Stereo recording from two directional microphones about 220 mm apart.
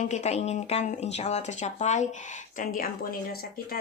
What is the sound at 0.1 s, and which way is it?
Speech, 30° left (ahead or behind).